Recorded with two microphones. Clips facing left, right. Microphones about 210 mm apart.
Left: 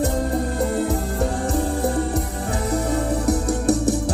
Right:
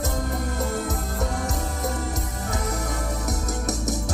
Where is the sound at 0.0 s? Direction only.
30° left (ahead or behind).